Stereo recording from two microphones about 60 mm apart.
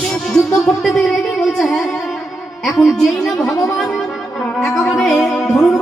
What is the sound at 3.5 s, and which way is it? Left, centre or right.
Speech, left.